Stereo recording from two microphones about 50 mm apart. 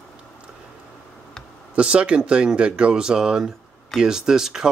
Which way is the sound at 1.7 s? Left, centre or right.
Right.